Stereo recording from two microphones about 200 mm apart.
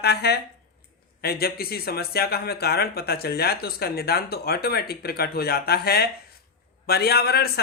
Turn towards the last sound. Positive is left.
turn(degrees=50)  # may be behind; listen again after turning